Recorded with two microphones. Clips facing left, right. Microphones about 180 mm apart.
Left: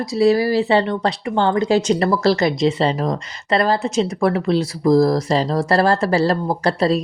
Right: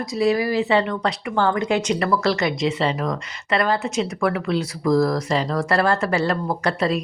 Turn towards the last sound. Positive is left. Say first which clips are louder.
# left 4 dB
turn(degrees=35)  # may be behind; listen again after turning